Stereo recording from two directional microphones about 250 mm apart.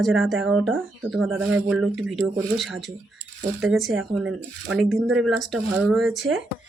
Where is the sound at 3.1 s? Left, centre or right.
Right.